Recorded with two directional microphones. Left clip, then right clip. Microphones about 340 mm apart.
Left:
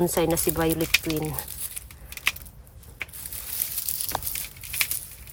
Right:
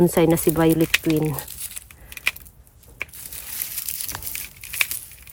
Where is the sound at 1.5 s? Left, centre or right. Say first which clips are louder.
Right 2 dB; centre.